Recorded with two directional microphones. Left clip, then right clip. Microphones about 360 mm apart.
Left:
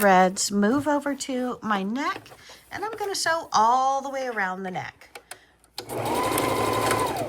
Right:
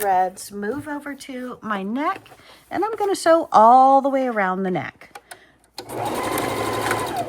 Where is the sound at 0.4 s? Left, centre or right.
Centre.